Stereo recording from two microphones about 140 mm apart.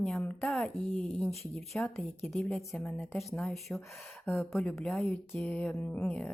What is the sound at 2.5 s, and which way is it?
A woman's voice, 5° left (ahead or behind).